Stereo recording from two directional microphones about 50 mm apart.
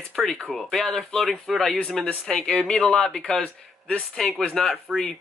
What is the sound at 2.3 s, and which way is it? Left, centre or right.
Speech, centre.